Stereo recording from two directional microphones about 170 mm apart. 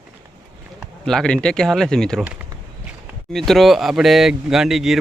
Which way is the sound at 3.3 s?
Centre (ahead or behind).